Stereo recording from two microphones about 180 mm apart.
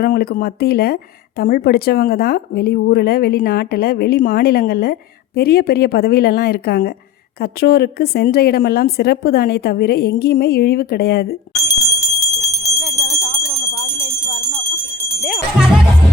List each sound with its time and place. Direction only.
0.0 s speech: 55° left (ahead or behind)
11.7 s bell: 20° left (ahead or behind)
13.2 s jingle bell: 20° left (ahead or behind)
15.2 s music: 5° right (ahead or behind)